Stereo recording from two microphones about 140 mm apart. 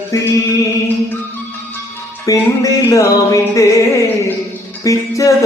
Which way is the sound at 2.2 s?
25° left (ahead or behind).